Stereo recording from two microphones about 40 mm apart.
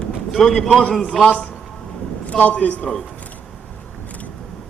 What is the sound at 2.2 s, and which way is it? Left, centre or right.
Speech, left.